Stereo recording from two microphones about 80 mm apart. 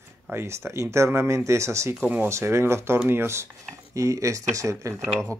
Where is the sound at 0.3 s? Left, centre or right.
Right.